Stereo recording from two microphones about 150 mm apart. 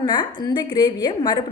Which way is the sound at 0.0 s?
30° left (ahead or behind).